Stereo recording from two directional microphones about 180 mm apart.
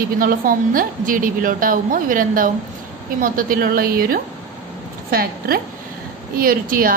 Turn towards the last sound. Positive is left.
turn(degrees=-50)  # may be behind; listen again after turning